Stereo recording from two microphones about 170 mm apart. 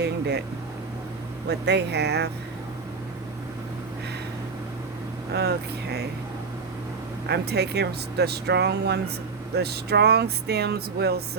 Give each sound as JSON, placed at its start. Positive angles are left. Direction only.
{"t": 0.0, "sound": "speech", "side_deg": -75}
{"t": 1.5, "sound": "speech", "side_deg": -85}
{"t": 5.3, "sound": "speech", "side_deg": -75}
{"t": 7.3, "sound": "speech", "side_deg": -75}